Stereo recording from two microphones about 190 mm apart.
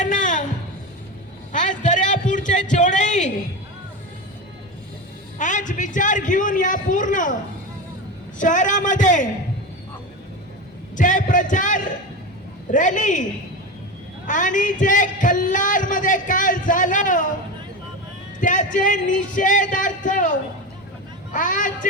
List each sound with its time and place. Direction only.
0.0 s music: 40° left (ahead or behind)
1.5 s a sound: 40° left (ahead or behind)
5.4 s speech: 40° left (ahead or behind)
8.4 s a man's voice: 40° left (ahead or behind)
10.9 s a man's voice: 40° left (ahead or behind)
14.3 s speech: 40° left (ahead or behind)
18.3 s a man's voice: 40° left (ahead or behind)
21.3 s speech: 45° left (ahead or behind)